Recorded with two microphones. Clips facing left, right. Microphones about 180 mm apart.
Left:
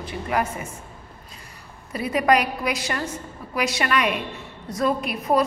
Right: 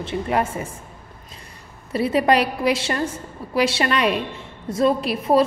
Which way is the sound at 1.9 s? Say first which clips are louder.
Right 2 dB; 30° right (ahead or behind).